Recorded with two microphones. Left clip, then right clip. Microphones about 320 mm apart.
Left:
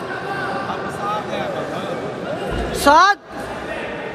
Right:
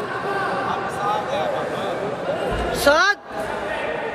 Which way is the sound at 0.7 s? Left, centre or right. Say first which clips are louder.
Right 1 dB; centre.